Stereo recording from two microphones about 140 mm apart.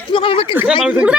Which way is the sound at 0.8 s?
10° right (ahead or behind).